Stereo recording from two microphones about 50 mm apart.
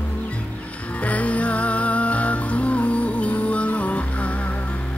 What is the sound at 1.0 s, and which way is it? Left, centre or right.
Music, left.